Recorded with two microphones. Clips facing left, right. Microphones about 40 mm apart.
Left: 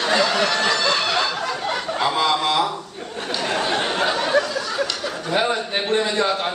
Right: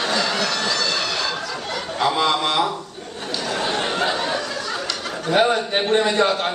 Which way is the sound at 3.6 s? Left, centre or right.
Centre.